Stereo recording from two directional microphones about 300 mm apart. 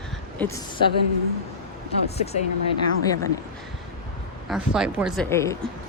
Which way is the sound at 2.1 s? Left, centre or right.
Left.